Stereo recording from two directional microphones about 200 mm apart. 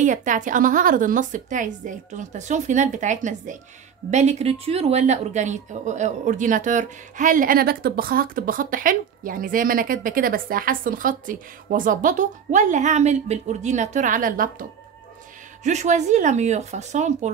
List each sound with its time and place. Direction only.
0.0 s speech: 40° right (ahead or behind)